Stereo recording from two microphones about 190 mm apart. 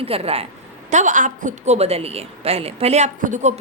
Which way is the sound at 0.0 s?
30° right (ahead or behind).